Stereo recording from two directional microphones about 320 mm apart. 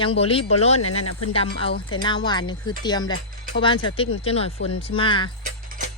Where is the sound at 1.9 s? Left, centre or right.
Centre.